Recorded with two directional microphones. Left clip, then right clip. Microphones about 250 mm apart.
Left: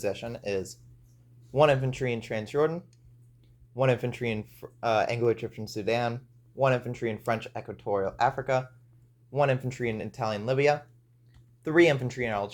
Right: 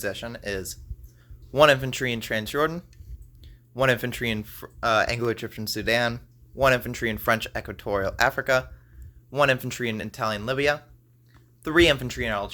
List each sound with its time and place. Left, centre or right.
0.0 s speech: centre
1.5 s speech: right